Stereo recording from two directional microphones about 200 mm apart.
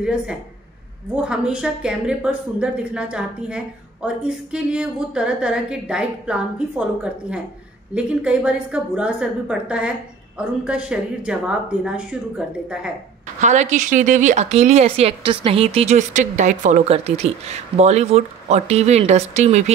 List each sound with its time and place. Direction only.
0.0 s speech: 5° right (ahead or behind)
7.9 s speech: 5° right (ahead or behind)
13.4 s a woman's voice: 35° right (ahead or behind)